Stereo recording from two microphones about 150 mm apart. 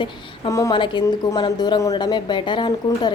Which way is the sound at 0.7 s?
30° left (ahead or behind).